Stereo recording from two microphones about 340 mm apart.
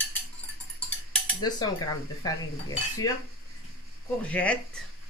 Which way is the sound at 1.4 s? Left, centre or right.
Centre.